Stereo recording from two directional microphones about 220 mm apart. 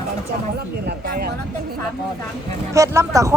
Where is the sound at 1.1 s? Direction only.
45° right (ahead or behind).